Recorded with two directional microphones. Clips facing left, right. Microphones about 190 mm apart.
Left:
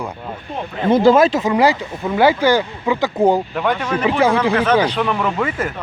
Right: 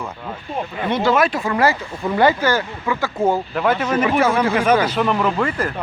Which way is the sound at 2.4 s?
15° left (ahead or behind).